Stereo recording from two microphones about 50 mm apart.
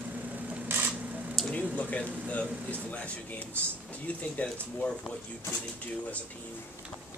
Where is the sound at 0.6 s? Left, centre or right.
Right.